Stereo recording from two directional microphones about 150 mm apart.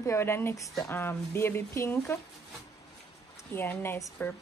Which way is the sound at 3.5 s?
15° left (ahead or behind).